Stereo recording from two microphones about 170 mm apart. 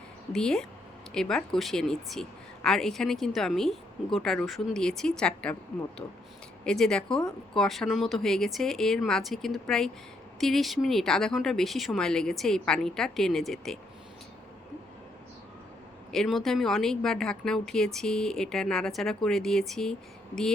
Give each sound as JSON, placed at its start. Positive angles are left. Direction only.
{"t": 0.3, "sound": "speech", "side_deg": 5}
{"t": 6.0, "sound": "speech", "side_deg": 20}
{"t": 6.7, "sound": "speech", "side_deg": 5}
{"t": 16.1, "sound": "speech", "side_deg": 0}